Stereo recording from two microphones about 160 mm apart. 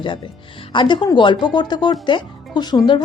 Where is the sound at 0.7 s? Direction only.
30° left (ahead or behind).